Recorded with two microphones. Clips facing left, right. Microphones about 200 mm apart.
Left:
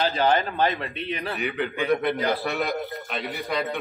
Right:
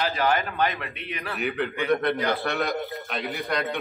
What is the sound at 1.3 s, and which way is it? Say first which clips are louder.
A man's voice: right 4 dB; centre (ahead or behind).